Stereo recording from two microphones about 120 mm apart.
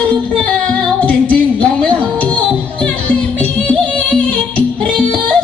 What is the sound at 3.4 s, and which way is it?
Music, 10° left (ahead or behind).